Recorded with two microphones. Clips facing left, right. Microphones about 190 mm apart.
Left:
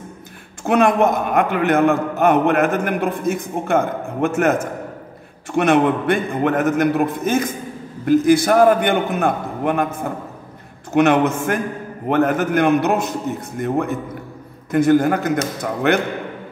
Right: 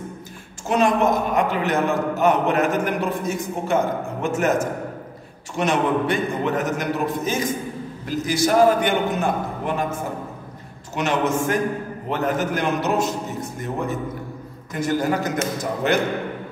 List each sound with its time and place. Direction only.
0.7 s a man's voice: 60° left (ahead or behind)
11.0 s a man's voice: 60° left (ahead or behind)